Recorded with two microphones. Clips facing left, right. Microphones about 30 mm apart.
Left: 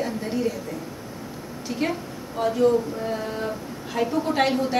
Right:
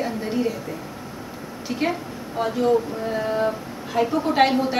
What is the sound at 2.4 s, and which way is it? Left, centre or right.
A woman's voice, centre.